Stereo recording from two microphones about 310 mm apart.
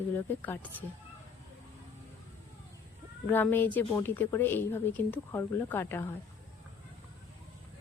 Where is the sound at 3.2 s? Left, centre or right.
Centre.